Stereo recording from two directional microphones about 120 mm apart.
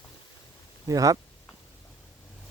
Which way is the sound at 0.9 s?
30° right (ahead or behind).